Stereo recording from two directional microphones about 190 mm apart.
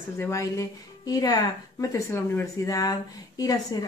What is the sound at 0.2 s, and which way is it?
Speech, 15° left (ahead or behind).